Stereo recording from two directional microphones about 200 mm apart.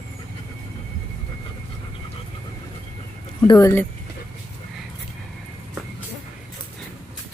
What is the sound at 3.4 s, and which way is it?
Speech, 20° left (ahead or behind).